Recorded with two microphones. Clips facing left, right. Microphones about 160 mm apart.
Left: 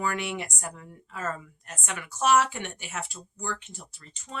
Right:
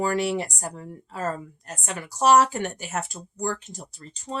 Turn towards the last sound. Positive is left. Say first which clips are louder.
# right 7 dB
turn(degrees=-35)  # may be behind; listen again after turning